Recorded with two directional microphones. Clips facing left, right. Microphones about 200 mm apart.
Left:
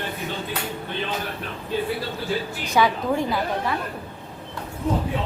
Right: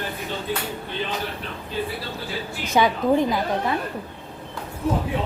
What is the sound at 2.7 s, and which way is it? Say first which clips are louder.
Speech: right 2 dB; 20° right (ahead or behind).